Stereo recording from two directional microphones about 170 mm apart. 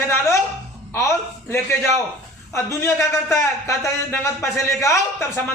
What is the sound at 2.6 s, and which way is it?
A man's voice, 15° left (ahead or behind).